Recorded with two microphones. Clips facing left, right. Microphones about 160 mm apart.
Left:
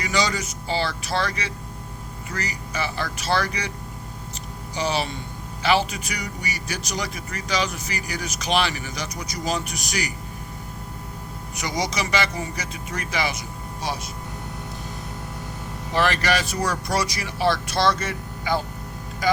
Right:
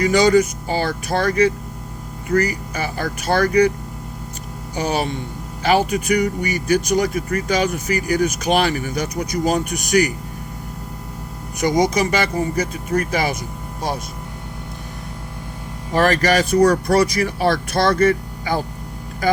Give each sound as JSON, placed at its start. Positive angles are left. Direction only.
{"t": 0.0, "sound": "speech", "side_deg": -50}
{"t": 4.7, "sound": "speech", "side_deg": -50}
{"t": 11.6, "sound": "speech", "side_deg": -50}
{"t": 15.9, "sound": "speech", "side_deg": -45}